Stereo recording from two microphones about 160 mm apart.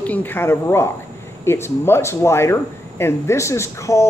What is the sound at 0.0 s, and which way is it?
Speech, 10° left (ahead or behind).